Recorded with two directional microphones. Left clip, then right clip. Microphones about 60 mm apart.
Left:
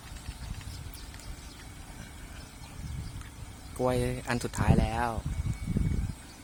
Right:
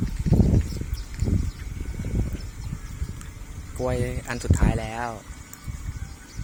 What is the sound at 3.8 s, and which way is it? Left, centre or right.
Speech, left.